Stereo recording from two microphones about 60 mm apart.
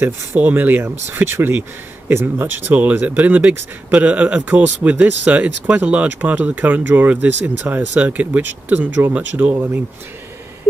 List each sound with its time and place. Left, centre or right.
0.0 s speech: right